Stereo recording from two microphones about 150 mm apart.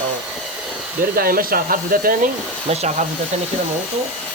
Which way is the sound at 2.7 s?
50° right (ahead or behind).